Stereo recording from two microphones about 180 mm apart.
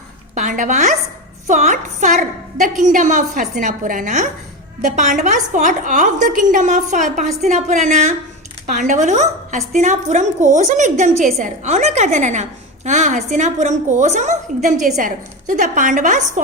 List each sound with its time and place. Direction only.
0.3 s a woman's voice: 45° right (ahead or behind)